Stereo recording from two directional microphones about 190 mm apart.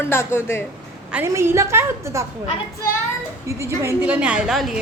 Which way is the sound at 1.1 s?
10° right (ahead or behind).